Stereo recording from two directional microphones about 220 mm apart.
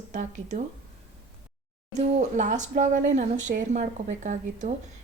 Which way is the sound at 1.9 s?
35° right (ahead or behind).